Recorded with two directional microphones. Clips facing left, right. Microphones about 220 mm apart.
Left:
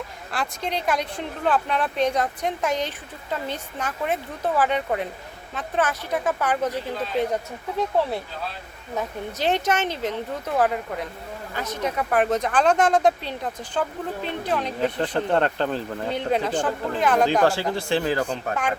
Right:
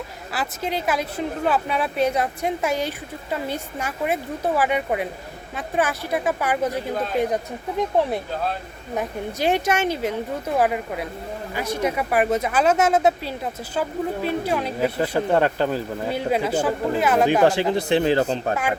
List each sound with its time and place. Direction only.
0.3 s speech: 5° right (ahead or behind)
17.4 s a man's voice: 20° right (ahead or behind)